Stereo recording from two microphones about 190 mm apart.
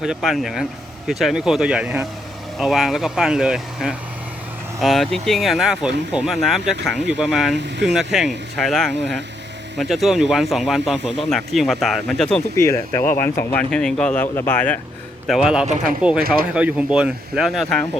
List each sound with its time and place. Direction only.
0.0 s speech: centre (ahead or behind)
7.5 s speech: 65° right (ahead or behind)
7.9 s speech: centre (ahead or behind)
12.5 s speech: 15° left (ahead or behind)
15.3 s speech: 5° right (ahead or behind)
16.2 s speech: 50° right (ahead or behind)
16.6 s speech: 5° right (ahead or behind)